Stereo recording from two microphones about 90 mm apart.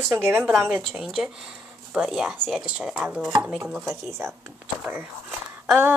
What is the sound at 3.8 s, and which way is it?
Speech, 30° right (ahead or behind).